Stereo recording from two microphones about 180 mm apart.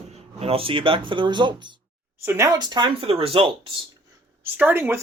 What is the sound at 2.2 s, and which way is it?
Speech, 15° right (ahead or behind).